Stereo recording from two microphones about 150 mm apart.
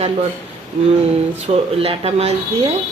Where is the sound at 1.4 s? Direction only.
40° right (ahead or behind).